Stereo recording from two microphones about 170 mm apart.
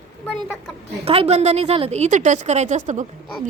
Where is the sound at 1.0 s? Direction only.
35° right (ahead or behind).